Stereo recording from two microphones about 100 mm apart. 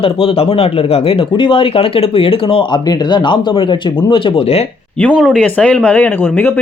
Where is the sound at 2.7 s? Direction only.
50° left (ahead or behind); by 4.6 s 65° left (ahead or behind).